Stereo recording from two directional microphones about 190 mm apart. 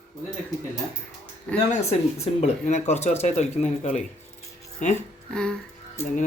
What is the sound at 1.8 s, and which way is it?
Speech, 35° left (ahead or behind).